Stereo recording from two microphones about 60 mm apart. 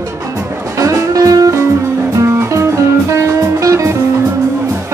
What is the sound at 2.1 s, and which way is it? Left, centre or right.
Music, right.